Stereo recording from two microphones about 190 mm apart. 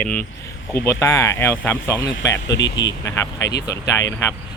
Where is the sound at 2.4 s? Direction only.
70° left (ahead or behind).